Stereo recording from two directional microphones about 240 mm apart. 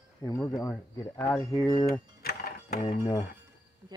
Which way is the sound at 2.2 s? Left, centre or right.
Left.